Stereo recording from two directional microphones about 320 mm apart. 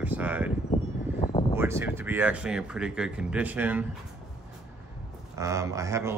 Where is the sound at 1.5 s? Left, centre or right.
Centre.